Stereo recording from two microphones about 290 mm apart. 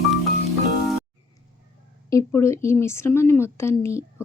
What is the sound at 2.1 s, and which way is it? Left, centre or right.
Speech, centre.